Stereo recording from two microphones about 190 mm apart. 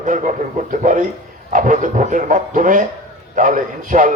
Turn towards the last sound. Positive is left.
turn(degrees=-45)  # may be behind; listen again after turning